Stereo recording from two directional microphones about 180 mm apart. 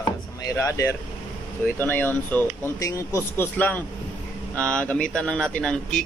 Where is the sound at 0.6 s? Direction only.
15° left (ahead or behind).